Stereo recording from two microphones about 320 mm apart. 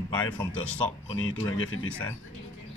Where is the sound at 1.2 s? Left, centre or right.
Left.